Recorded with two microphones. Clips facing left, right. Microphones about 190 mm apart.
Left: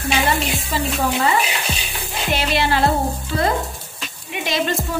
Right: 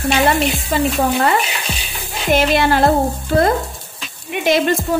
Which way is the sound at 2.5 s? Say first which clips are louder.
Right 1 dB; 50° right (ahead or behind).